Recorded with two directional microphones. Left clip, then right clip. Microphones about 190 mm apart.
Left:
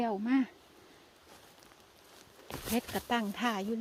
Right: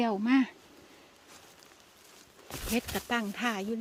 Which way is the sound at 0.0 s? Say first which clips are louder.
Right 4 dB; 35° right (ahead or behind).